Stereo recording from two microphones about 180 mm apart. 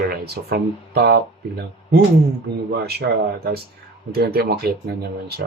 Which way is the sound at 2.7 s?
65° right (ahead or behind).